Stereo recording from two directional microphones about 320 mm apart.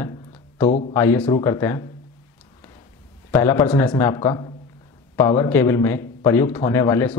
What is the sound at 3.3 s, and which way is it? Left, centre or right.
Speech, centre.